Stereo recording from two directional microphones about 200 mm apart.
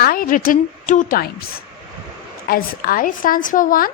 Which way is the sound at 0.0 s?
45° left (ahead or behind).